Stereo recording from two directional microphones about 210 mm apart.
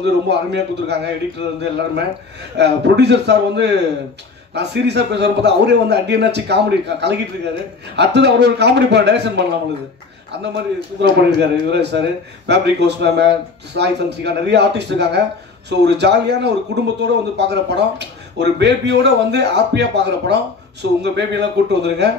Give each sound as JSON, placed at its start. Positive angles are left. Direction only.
{"t": 0.0, "sound": "a man's voice", "side_deg": -55}